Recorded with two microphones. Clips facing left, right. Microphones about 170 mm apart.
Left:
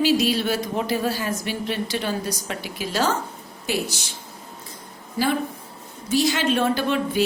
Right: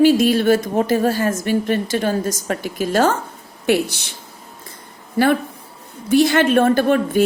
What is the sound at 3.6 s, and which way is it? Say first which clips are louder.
Speech: right 9 dB; 60° right (ahead or behind).